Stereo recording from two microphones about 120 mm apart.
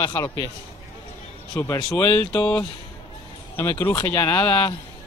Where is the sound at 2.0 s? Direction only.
10° left (ahead or behind).